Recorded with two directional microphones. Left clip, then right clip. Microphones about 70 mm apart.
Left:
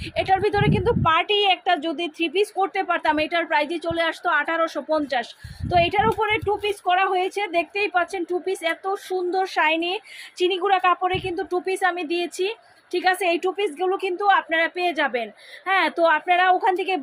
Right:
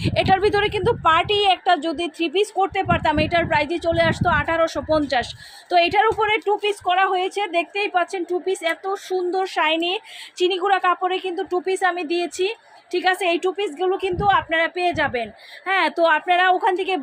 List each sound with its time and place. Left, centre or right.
0.0 s a woman's voice: right
4.9 s speech: right
5.6 s a woman's voice: right
6.8 s a woman's voice: right
10.7 s a woman's voice: centre